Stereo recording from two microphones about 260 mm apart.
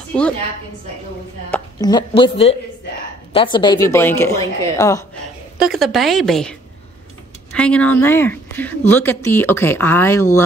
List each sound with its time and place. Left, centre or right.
1.5 s a woman's voice: centre
5.6 s a woman's voice: centre
7.5 s a woman's voice: centre